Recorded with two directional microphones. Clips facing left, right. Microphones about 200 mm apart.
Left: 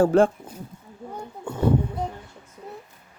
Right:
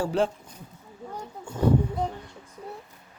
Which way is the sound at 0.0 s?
50° left (ahead or behind).